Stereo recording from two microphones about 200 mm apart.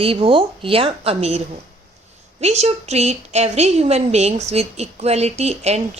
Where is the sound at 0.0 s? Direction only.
30° right (ahead or behind).